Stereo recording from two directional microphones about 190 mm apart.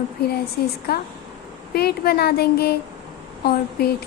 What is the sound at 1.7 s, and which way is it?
Speech, 55° left (ahead or behind).